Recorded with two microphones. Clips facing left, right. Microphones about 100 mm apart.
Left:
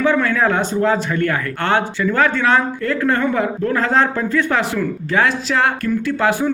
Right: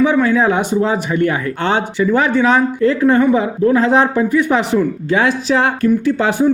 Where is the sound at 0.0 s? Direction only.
15° right (ahead or behind).